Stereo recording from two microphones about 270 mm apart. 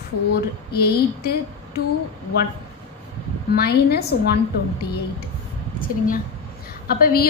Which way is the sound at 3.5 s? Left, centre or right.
Left.